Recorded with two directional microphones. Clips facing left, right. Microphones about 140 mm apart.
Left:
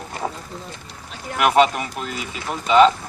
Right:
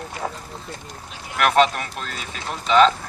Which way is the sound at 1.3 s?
10° left (ahead or behind).